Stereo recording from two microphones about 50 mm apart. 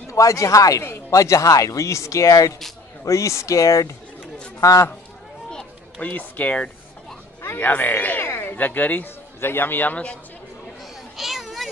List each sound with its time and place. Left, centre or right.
0.1 s speech: left
5.9 s speech: left
8.2 s a sound: left
8.5 s speech: left
9.4 s a man's voice: left
11.1 s children playing: centre